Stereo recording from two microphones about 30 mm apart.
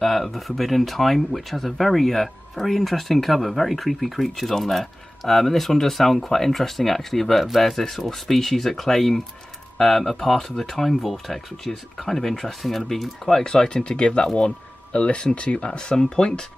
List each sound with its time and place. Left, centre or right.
0.0 s speech: centre
7.4 s speech: centre
7.9 s speech: centre
13.3 s speech: left
13.8 s speech: left
14.2 s speech: left
14.9 s speech: left
15.2 s speech: left